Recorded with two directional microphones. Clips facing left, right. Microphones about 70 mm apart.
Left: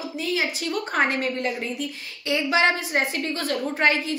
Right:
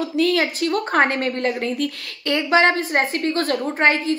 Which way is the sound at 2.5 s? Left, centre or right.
Right.